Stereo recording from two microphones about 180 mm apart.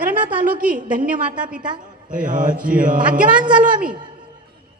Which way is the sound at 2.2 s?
50° right (ahead or behind).